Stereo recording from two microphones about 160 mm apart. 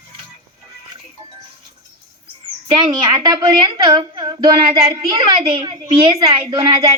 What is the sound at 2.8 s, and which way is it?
A woman's voice, 25° right (ahead or behind).